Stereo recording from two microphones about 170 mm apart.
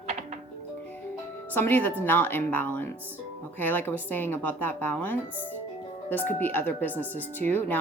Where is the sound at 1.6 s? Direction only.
10° left (ahead or behind).